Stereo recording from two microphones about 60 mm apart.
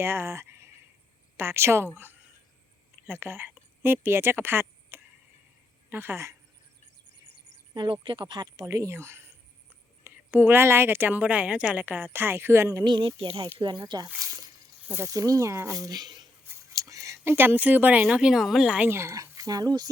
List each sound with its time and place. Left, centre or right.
0.0 s speech: right
1.9 s speech: right
8.6 s speech: right
11.2 s a woman's voice: right
11.8 s speech: right
14.2 s a sound: right
15.0 s speech: right
15.8 s speech: right
16.7 s a sound: right
17.2 s speech: right
18.0 s a woman's voice: centre
18.9 s speech: right
19.1 s speech: right